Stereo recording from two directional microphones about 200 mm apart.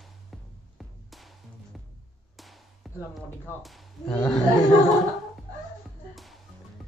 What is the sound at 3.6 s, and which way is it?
Speech, 5° left (ahead or behind).